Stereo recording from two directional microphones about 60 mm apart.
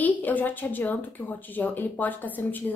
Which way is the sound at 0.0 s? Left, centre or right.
Left.